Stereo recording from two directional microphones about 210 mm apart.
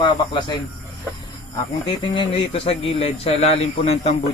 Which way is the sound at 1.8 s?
25° left (ahead or behind).